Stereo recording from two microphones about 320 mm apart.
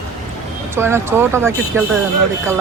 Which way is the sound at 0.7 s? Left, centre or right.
Centre.